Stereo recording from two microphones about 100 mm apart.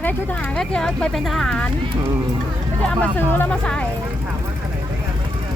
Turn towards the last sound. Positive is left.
turn(degrees=10)  # may be behind; listen again after turning